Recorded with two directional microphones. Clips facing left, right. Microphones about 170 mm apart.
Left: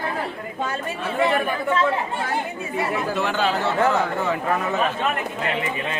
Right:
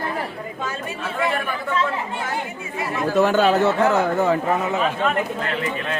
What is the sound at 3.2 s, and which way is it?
Speech, 45° right (ahead or behind).